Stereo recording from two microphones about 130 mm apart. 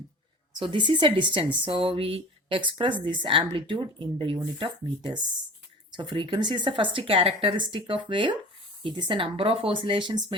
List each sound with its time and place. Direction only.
0.5 s speech: 40° right (ahead or behind)